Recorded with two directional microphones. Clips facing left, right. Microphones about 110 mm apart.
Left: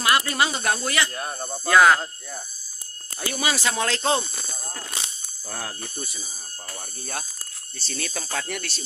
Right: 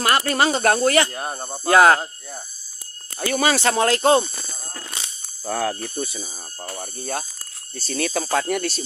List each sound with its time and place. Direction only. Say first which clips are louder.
0.0 s speech: right 3 dB; 45° right (ahead or behind)
1.4 s speech: right 3 dB; 20° right (ahead or behind)
1.7 s speech: right 3 dB; 35° right (ahead or behind)
3.3 s speech: right 6 dB; 60° right (ahead or behind)
5.5 s speech: right 11 dB; 90° right
7.0 s speech: right 6 dB; 35° right (ahead or behind)
7.8 s speech: right 9 dB; 55° right (ahead or behind)